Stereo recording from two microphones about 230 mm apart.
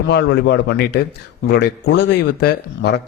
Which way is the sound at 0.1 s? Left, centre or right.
Left.